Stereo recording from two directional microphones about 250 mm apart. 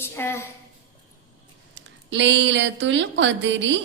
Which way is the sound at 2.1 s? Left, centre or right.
Right.